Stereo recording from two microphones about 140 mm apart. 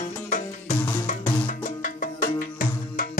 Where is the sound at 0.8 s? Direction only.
15° left (ahead or behind).